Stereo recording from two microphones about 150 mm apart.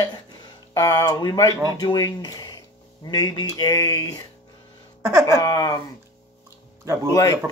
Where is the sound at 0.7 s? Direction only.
25° left (ahead or behind).